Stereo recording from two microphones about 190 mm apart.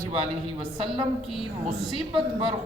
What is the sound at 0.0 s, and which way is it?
Speech, 30° right (ahead or behind).